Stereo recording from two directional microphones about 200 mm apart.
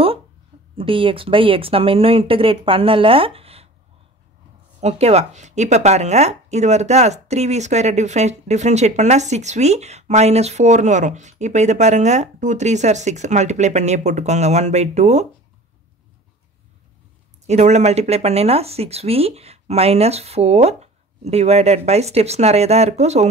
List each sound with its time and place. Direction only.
0.7 s speech: 25° right (ahead or behind)
4.7 s speech: 35° right (ahead or behind)
17.5 s speech: 35° right (ahead or behind)